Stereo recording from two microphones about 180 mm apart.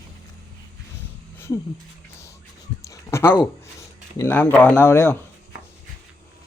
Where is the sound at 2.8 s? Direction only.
15° left (ahead or behind).